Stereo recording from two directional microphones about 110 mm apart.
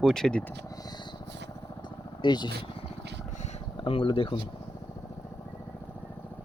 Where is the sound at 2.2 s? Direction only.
45° left (ahead or behind).